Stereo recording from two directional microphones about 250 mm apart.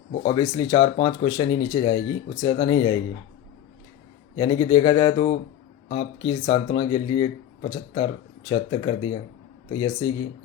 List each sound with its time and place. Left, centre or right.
0.1 s speech: centre
4.4 s speech: centre